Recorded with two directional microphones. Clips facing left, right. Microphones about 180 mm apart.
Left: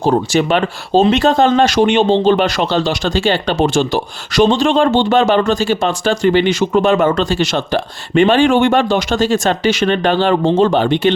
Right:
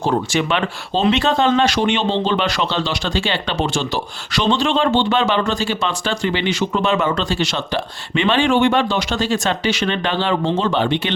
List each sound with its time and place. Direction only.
0.0 s speech: 40° left (ahead or behind)